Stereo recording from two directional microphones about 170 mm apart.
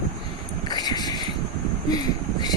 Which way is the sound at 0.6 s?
25° left (ahead or behind).